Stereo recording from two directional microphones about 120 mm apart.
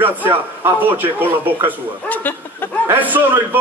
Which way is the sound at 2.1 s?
15° left (ahead or behind).